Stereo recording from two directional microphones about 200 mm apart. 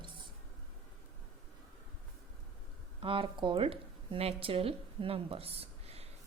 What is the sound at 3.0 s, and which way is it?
Speech, 25° right (ahead or behind).